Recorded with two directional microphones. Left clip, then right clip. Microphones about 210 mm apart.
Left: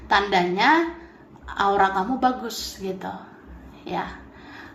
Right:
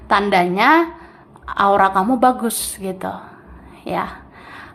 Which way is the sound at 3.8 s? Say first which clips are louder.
Right 6 dB; 30° right (ahead or behind).